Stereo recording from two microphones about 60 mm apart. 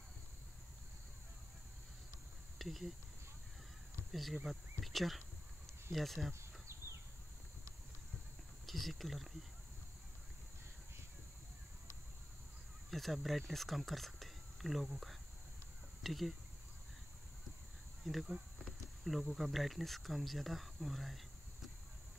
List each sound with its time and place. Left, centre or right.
2.6 s speech: centre
4.1 s speech: centre
6.7 s a sound: right
8.6 s speech: centre
12.9 s speech: centre
18.1 s speech: centre